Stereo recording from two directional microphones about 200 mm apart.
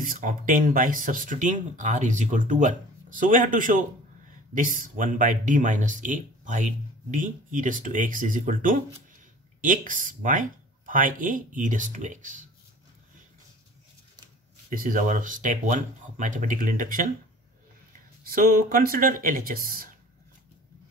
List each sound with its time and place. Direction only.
0.0 s speech: 45° right (ahead or behind)
14.7 s speech: 45° right (ahead or behind)
18.2 s speech: 45° right (ahead or behind)